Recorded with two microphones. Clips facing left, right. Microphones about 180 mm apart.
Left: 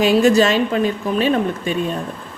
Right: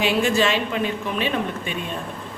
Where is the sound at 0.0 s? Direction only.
40° left (ahead or behind).